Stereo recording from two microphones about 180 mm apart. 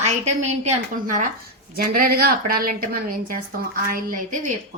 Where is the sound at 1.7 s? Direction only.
55° right (ahead or behind).